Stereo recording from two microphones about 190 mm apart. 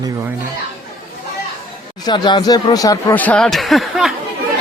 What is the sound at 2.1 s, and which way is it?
Speech, 20° left (ahead or behind).